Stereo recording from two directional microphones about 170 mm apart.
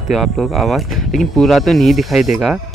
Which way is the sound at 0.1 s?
Centre (ahead or behind).